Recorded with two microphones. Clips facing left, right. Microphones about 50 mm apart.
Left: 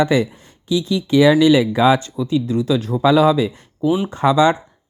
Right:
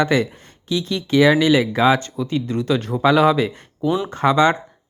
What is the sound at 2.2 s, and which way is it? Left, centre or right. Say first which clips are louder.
Speech: left 2 dB; right.